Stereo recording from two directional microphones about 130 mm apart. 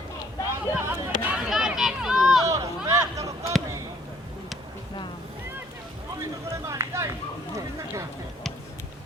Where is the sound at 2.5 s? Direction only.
25° right (ahead or behind).